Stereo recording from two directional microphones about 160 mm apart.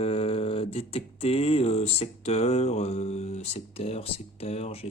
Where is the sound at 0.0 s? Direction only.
35° left (ahead or behind).